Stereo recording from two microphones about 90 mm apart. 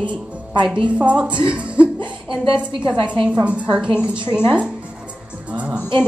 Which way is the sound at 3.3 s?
15° right (ahead or behind).